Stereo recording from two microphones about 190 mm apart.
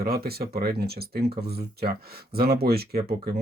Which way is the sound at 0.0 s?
55° right (ahead or behind).